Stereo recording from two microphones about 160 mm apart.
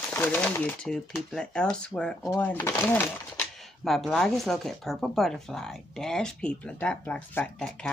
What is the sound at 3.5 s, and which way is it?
Speech, centre (ahead or behind).